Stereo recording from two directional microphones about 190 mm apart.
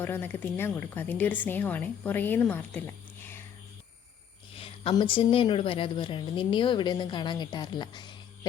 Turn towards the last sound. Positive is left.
turn(degrees=25)  # may be behind; listen again after turning